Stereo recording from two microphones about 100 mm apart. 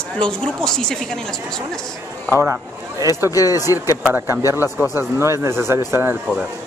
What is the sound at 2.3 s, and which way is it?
Speech, 20° right (ahead or behind).